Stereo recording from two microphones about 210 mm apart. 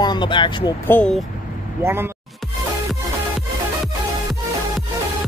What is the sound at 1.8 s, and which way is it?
Speech, 10° right (ahead or behind).